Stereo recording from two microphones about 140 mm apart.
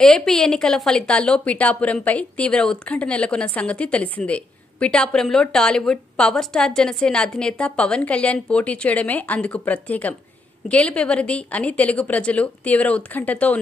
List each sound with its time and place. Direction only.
0.0 s a woman's voice: 5° left (ahead or behind)